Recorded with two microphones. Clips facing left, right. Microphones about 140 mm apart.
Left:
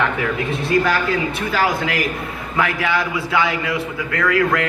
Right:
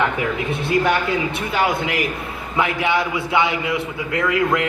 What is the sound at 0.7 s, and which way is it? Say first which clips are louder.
A man's voice: even; 25° right (ahead or behind).